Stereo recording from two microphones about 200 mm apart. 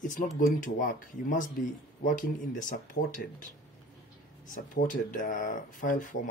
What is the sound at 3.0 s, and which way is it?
Speech, 40° left (ahead or behind).